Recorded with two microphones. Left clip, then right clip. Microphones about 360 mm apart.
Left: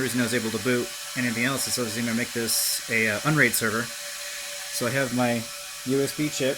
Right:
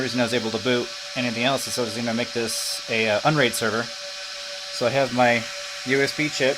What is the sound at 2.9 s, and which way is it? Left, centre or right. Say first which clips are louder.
Speech: right 4 dB; right.